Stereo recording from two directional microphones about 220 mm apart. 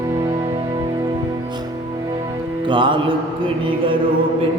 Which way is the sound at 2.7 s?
20° right (ahead or behind).